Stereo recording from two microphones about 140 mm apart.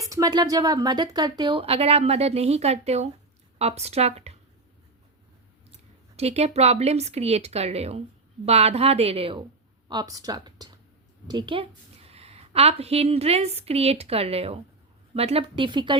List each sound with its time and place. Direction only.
0.1 s speech: 25° right (ahead or behind); by 4.4 s 50° right (ahead or behind)
6.1 s speech: 50° right (ahead or behind)
9.9 s speech: 25° right (ahead or behind)
12.0 s a woman's voice: 45° right (ahead or behind)